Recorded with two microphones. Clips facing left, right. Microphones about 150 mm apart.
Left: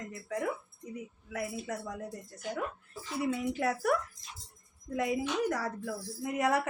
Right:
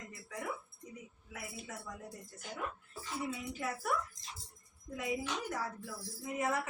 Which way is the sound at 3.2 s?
75° left (ahead or behind).